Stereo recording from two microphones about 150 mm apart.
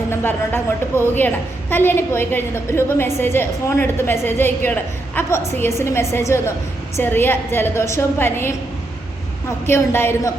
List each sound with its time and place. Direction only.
0.1 s a woman's voice: 15° left (ahead or behind)
9.6 s a woman's voice: 15° left (ahead or behind)